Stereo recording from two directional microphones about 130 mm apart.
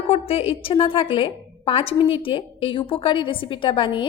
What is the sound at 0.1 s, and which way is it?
A woman's voice, 50° left (ahead or behind).